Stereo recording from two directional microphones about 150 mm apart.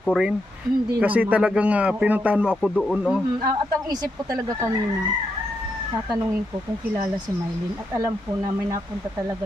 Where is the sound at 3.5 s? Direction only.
25° right (ahead or behind).